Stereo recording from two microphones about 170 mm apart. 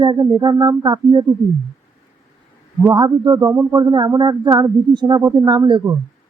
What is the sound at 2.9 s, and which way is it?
Speech, 25° right (ahead or behind).